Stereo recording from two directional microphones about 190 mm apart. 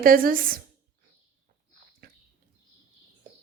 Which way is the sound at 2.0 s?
50° right (ahead or behind).